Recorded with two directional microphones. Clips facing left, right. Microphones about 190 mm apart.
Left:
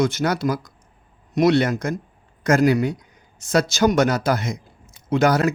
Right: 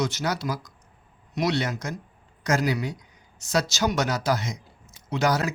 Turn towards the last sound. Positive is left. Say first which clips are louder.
# left 6 dB
turn(degrees=55)  # may be behind; listen again after turning